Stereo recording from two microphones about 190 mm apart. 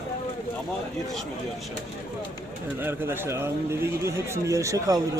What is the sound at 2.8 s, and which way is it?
A man's voice, 10° right (ahead or behind).